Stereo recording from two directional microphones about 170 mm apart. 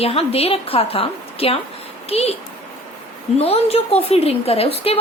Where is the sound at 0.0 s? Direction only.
35° left (ahead or behind).